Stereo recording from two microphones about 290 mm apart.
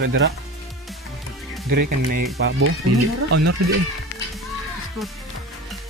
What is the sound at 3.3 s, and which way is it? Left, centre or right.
Speech, right.